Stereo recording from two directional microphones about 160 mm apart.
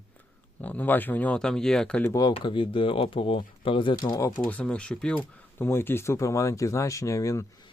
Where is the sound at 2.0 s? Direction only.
20° left (ahead or behind).